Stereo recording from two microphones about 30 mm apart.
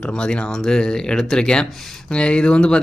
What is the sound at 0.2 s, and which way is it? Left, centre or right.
Speech, left.